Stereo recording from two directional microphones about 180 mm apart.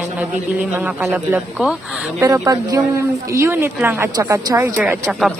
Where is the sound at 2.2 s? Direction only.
20° right (ahead or behind).